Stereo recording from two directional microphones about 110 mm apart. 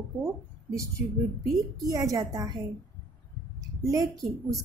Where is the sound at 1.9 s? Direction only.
35° right (ahead or behind).